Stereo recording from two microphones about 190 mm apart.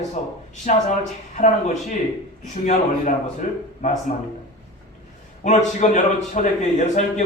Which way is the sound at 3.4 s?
45° left (ahead or behind).